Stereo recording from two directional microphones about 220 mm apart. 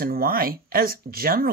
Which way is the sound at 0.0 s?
40° right (ahead or behind).